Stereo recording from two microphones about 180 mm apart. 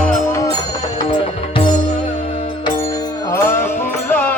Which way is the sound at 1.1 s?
30° left (ahead or behind).